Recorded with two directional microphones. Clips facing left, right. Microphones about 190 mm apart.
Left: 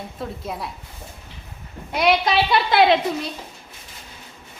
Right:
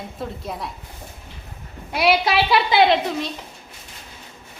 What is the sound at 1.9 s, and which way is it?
A woman's voice, 5° right (ahead or behind).